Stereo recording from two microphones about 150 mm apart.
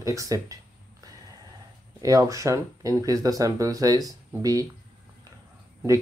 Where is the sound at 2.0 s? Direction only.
20° right (ahead or behind).